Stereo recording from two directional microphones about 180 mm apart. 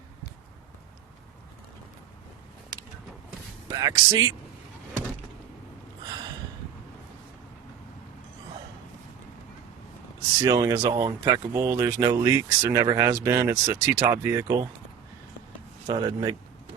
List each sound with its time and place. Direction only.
3.7 s speech: 20° right (ahead or behind)
10.4 s speech: 20° right (ahead or behind)
15.9 s speech: 25° right (ahead or behind)